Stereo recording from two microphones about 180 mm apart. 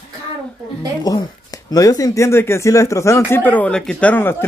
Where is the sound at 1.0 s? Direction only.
20° left (ahead or behind).